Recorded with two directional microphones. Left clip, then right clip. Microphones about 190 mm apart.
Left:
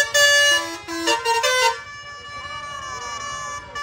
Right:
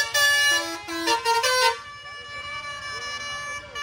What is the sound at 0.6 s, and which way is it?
Vehicle horn, 5° right (ahead or behind).